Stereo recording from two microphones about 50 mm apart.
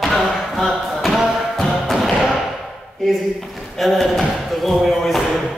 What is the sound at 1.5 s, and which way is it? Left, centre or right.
Music, centre.